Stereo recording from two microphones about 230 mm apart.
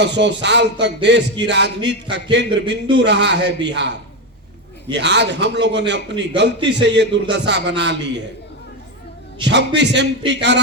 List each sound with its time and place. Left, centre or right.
0.0 s a man's voice: right
4.9 s a man's voice: right
9.4 s a man's voice: right